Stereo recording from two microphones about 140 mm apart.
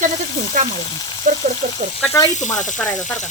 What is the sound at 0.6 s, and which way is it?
Frying, 65° right (ahead or behind).